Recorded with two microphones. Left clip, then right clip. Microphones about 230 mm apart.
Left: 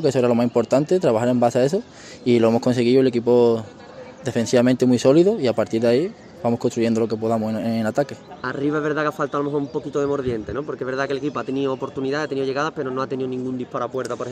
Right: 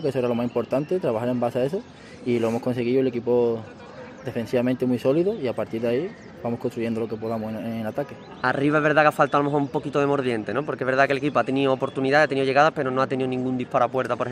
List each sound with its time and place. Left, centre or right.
0.0 s speech: left
8.4 s a man's voice: right